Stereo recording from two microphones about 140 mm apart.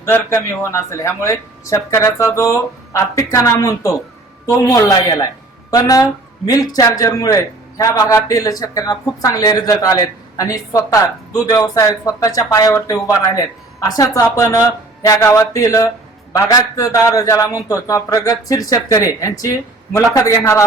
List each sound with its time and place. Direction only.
0.0 s a man's voice: 20° left (ahead or behind)